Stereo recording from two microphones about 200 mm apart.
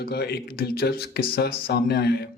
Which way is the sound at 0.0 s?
55° left (ahead or behind).